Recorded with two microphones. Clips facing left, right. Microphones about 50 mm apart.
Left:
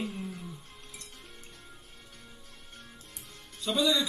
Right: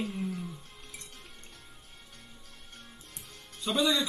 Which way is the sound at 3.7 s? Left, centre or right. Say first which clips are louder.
Even; centre.